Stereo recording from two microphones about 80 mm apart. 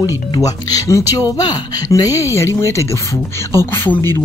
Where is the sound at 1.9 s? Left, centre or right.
Left.